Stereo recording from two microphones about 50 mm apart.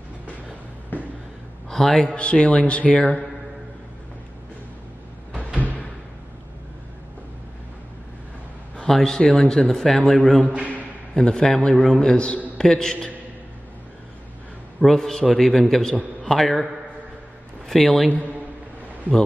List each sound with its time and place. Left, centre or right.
0.9 s a sound: left
1.7 s a man's voice: centre
2.0 s speech: left
8.7 s a man's voice: centre
14.8 s a man's voice: centre
17.6 s a man's voice: centre